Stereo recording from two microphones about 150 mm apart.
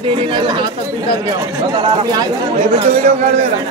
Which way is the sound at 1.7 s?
35° right (ahead or behind).